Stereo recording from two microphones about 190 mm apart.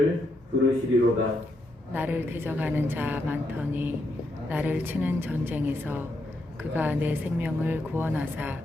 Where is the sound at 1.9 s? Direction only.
10° right (ahead or behind).